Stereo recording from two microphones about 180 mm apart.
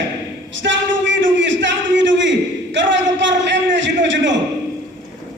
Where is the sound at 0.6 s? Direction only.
90° right.